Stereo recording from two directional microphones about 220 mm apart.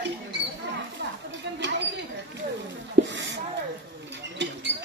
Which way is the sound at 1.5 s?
55° right (ahead or behind).